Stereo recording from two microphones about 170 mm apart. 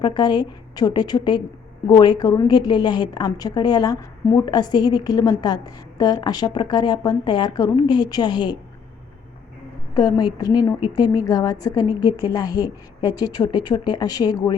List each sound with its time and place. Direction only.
0.0 s a woman's voice: 25° left (ahead or behind)
9.9 s a woman's voice: 25° left (ahead or behind)